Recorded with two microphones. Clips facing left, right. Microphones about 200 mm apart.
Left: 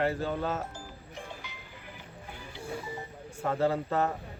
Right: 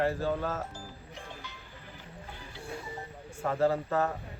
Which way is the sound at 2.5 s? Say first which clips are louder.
Left 3 dB; 15° left (ahead or behind).